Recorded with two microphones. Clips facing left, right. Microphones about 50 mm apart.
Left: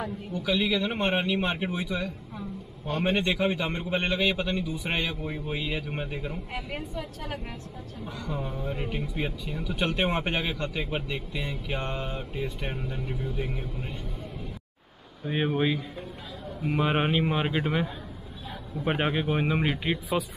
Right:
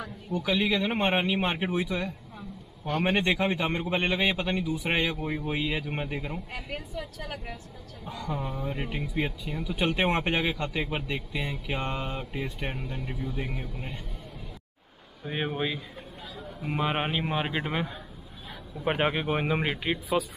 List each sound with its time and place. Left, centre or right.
0.4 s a man's voice: centre
1.0 s a man's voice: centre
2.9 s a man's voice: right
3.2 s a man's voice: centre
6.5 s a woman's voice: centre
8.5 s a man's voice: centre
15.2 s speech: centre